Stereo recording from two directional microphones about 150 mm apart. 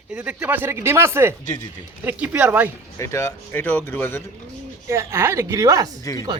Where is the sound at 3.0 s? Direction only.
20° left (ahead or behind).